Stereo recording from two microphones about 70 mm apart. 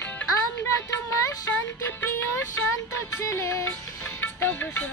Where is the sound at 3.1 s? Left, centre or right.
Left.